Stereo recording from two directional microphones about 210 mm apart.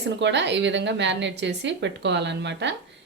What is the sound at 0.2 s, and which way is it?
Speech, 55° right (ahead or behind).